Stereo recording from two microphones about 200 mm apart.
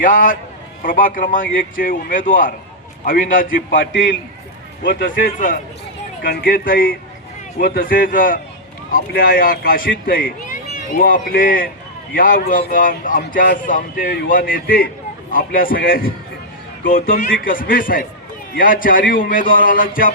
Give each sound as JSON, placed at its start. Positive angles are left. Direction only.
{"t": 0.0, "sound": "a man's voice", "side_deg": 40}
{"t": 3.8, "sound": "a man's voice", "side_deg": 65}
{"t": 4.8, "sound": "a man's voice", "side_deg": 45}